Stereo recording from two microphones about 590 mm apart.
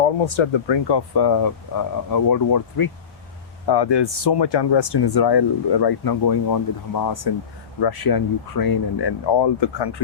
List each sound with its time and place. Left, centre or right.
0.0 s speech: left